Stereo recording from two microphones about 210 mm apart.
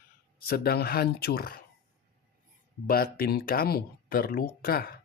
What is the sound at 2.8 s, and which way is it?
Speech, 45° left (ahead or behind).